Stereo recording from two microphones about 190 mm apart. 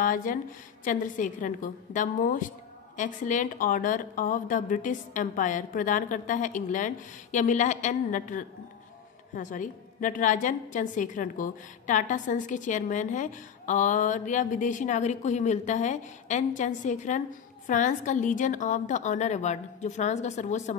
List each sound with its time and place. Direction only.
0.0 s a woman's voice: 45° left (ahead or behind)